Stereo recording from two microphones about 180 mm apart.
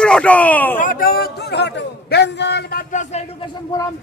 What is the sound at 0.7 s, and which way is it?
A man's voice, 50° left (ahead or behind).